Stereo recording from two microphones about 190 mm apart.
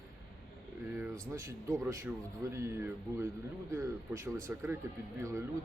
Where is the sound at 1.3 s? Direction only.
15° right (ahead or behind).